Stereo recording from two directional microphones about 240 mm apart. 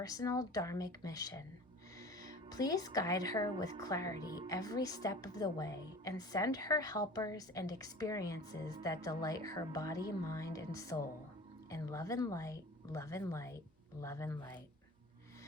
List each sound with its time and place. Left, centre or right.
0.0 s a woman's voice: centre
2.5 s a woman's voice: centre